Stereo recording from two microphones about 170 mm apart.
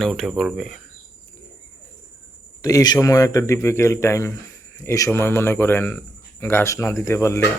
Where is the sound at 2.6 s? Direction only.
20° left (ahead or behind).